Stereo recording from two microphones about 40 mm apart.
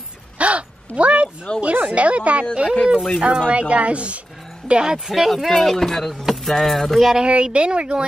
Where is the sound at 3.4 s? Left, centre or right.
Right.